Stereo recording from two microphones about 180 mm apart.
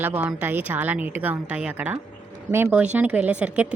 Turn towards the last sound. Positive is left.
turn(degrees=-5)  # may be behind; listen again after turning